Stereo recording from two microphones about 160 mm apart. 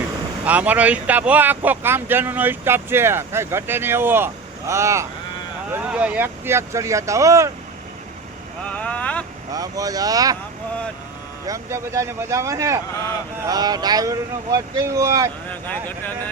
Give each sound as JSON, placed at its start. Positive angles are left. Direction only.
{"t": 0.4, "sound": "speech", "side_deg": -10}
{"t": 8.7, "sound": "speech", "side_deg": 10}
{"t": 9.5, "sound": "speech", "side_deg": -20}
{"t": 11.4, "sound": "speech", "side_deg": -20}
{"t": 15.4, "sound": "speech", "side_deg": 10}